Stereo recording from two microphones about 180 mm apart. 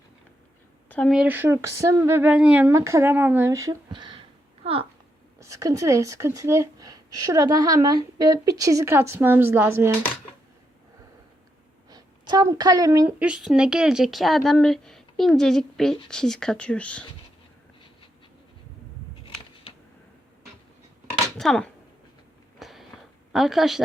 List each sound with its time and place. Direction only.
0.9 s a sound: 10° left (ahead or behind)
1.1 s a child's voice: 10° right (ahead or behind); by 4.9 s 30° right (ahead or behind)
5.4 s speech: 15° right (ahead or behind)
11.9 s a woman's voice: 20° right (ahead or behind); by 17.1 s 5° left (ahead or behind)
21.3 s a woman's voice: centre (ahead or behind)
22.5 s a sound: centre (ahead or behind)
23.3 s a woman's voice: centre (ahead or behind)